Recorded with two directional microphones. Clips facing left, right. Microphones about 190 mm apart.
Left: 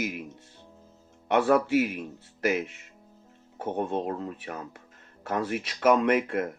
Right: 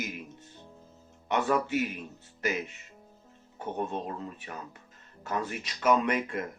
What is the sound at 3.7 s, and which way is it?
A man's voice, 60° left (ahead or behind).